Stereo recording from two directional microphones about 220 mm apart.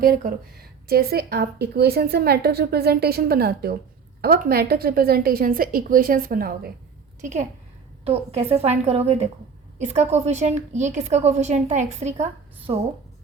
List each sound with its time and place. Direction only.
0.0 s a woman's voice: 40° right (ahead or behind)